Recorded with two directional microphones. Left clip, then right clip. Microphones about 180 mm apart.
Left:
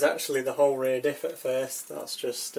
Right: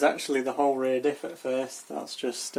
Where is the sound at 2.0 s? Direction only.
50° right (ahead or behind).